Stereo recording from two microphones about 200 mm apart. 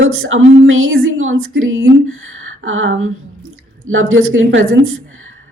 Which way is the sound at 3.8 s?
80° right.